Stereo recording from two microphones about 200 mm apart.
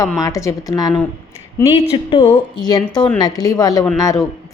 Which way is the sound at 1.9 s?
25° left (ahead or behind).